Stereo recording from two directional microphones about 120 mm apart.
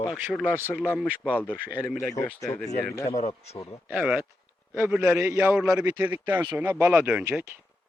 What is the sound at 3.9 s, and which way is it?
A man's voice, 10° right (ahead or behind).